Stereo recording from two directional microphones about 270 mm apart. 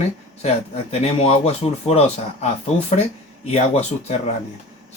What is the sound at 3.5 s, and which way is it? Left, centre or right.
Speech, left.